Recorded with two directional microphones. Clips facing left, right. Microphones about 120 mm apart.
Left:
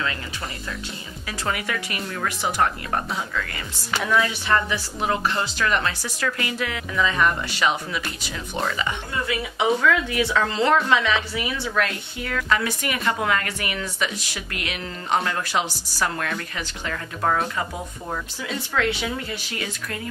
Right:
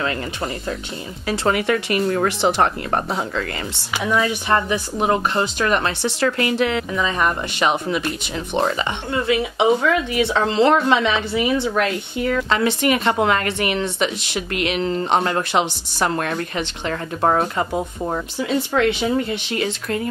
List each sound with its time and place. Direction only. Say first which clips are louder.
1.2 s speech: right 9 dB; 30° right (ahead or behind)
3.9 s speech: right 1 dB; 10° right (ahead or behind)
4.3 s speech: right 4 dB; 20° right (ahead or behind)